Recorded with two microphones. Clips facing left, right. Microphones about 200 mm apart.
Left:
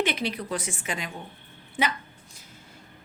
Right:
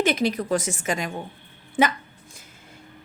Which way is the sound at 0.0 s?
45° right (ahead or behind).